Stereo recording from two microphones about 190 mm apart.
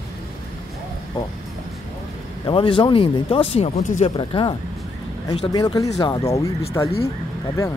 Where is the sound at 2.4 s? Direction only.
25° left (ahead or behind).